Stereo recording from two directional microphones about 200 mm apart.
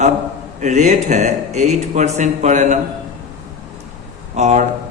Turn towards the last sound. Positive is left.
turn(degrees=-35)  # may be behind; listen again after turning